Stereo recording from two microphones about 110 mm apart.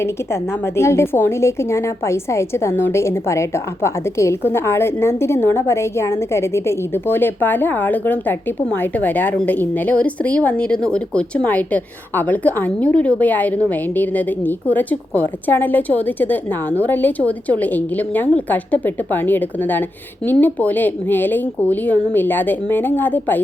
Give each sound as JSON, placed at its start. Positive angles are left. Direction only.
{"t": 0.8, "sound": "a woman's voice", "side_deg": 25}